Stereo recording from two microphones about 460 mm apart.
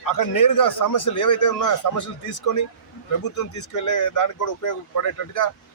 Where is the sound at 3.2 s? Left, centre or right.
Left.